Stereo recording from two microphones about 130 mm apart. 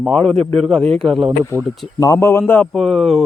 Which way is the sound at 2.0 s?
25° left (ahead or behind).